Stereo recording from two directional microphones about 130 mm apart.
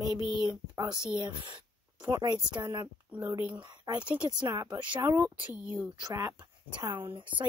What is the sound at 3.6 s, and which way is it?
Speech, 35° right (ahead or behind).